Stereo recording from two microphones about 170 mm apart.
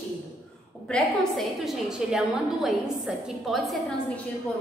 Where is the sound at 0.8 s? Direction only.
5° left (ahead or behind).